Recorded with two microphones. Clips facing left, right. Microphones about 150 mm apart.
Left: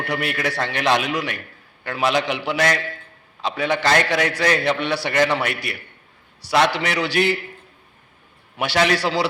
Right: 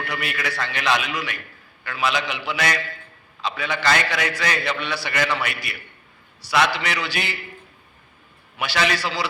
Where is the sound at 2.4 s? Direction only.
35° left (ahead or behind).